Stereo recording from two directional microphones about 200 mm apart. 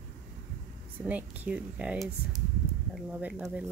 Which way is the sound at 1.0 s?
10° right (ahead or behind).